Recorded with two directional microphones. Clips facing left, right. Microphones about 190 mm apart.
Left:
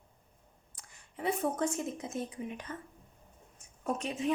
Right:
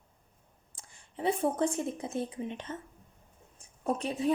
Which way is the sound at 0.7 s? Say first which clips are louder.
Right 3 dB; 30° right (ahead or behind).